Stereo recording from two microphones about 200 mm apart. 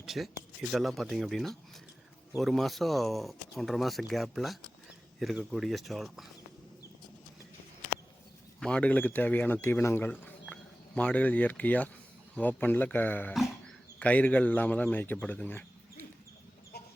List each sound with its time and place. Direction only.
0.0 s a sound: centre (ahead or behind)
0.7 s speech: centre (ahead or behind)
8.6 s speech: 5° left (ahead or behind)
16.7 s chicken: 55° left (ahead or behind)